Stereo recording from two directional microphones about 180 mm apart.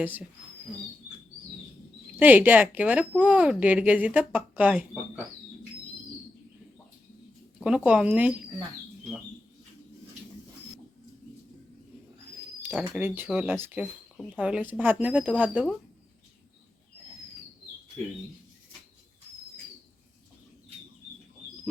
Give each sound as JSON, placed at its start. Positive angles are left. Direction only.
{"t": 0.0, "sound": "speech", "side_deg": -10}
{"t": 2.1, "sound": "speech", "side_deg": -10}
{"t": 7.6, "sound": "speech", "side_deg": -5}
{"t": 12.6, "sound": "speech", "side_deg": -10}